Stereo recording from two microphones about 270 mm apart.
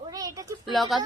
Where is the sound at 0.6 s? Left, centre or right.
Centre.